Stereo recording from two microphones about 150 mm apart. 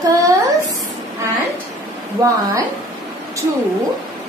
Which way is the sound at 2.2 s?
25° right (ahead or behind).